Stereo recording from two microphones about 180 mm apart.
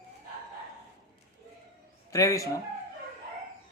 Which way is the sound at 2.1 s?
15° left (ahead or behind).